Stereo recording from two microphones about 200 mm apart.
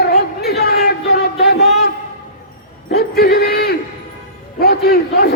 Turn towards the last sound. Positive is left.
turn(degrees=50)  # may be behind; listen again after turning